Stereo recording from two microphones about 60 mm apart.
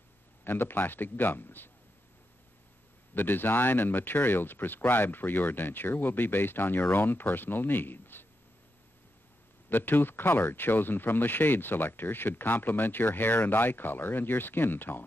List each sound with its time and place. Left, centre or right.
0.4 s speech: left
3.2 s speech: left
9.7 s speech: left